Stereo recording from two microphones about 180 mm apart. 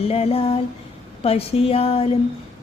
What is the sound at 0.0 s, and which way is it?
Music, 35° left (ahead or behind).